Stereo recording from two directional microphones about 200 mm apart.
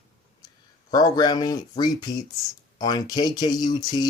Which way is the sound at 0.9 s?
20° left (ahead or behind).